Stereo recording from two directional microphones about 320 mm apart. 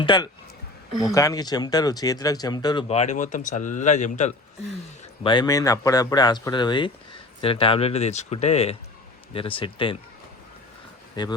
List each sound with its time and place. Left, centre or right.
0.0 s speech: centre
11.1 s speech: centre